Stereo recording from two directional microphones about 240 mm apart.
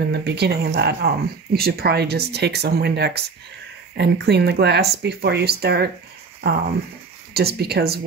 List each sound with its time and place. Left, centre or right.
0.1 s speech: right
7.3 s speech: right